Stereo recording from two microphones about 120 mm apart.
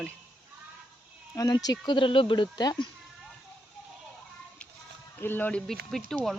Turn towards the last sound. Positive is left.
turn(degrees=0)  # may be behind; listen again after turning